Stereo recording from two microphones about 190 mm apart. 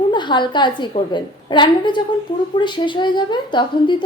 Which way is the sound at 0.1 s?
25° left (ahead or behind).